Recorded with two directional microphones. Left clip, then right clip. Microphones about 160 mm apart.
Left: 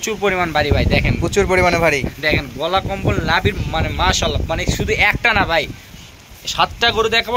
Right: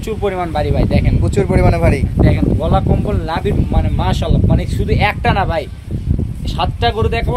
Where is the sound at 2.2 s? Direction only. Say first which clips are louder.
Right 4 dB; 25° right (ahead or behind).